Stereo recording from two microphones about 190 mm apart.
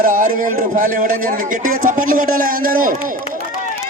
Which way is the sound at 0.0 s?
45° right (ahead or behind).